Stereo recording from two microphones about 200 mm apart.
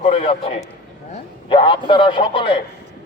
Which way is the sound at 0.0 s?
30° left (ahead or behind).